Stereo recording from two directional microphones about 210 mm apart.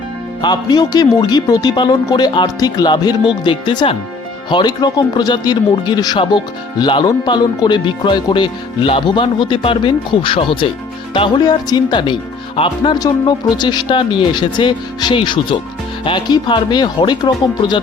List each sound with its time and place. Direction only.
0.4 s speech: 20° left (ahead or behind)